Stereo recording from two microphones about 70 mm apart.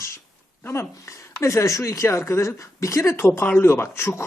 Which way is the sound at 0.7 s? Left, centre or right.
Left.